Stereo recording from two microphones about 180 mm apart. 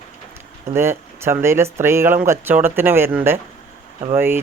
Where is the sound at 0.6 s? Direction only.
15° right (ahead or behind).